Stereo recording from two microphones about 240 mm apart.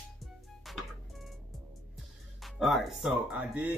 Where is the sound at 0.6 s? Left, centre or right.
Centre.